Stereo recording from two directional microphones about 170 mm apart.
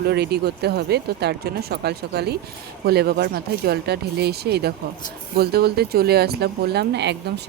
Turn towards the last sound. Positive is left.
turn(degrees=-85)